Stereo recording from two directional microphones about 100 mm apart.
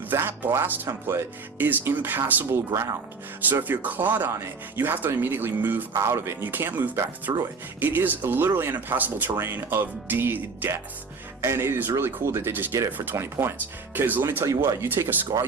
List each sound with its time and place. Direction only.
0.1 s speech: 20° right (ahead or behind)